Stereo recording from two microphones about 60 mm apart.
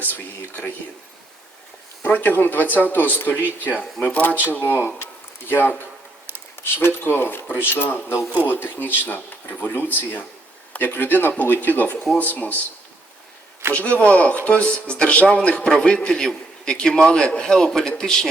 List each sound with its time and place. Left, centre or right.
2.0 s speech: left
4.6 s speech: left
13.7 s speech: left